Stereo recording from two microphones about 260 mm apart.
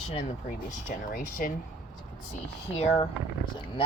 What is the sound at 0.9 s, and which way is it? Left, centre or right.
Speech, left.